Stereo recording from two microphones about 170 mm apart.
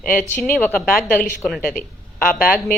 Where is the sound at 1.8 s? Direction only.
60° left (ahead or behind).